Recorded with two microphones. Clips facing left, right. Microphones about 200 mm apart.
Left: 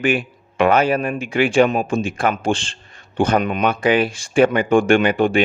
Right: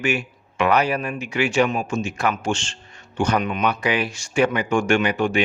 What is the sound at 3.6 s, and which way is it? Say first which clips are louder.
Speech: left 5 dB; 50° left (ahead or behind).